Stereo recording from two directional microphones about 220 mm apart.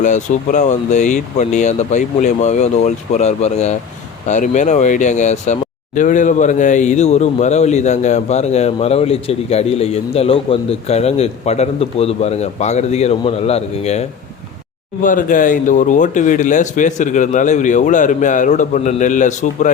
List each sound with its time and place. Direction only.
0.0 s speech: 35° left (ahead or behind)
15.0 s speech: 35° left (ahead or behind)